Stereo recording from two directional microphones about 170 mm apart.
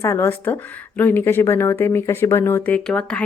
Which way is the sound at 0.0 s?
15° left (ahead or behind).